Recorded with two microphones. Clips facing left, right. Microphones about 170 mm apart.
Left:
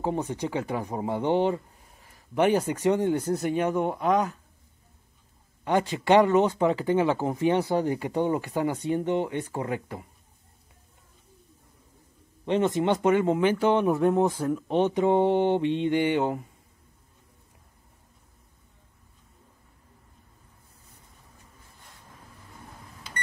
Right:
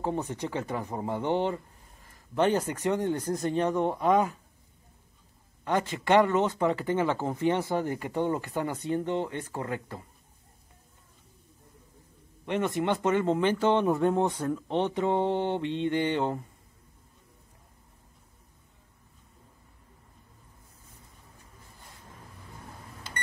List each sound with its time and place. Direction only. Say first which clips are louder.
0.0 s speech: left 3 dB; 15° left (ahead or behind)
5.6 s speech: left 3 dB; 15° left (ahead or behind)
12.4 s speech: left 4 dB; 20° left (ahead or behind)